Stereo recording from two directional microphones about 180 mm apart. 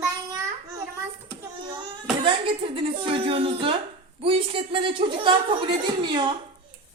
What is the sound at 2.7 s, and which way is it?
A woman's voice, 30° right (ahead or behind).